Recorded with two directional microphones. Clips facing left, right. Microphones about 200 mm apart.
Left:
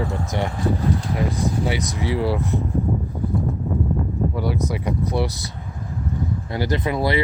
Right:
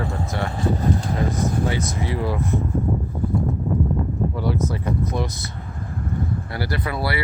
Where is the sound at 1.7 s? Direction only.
15° left (ahead or behind).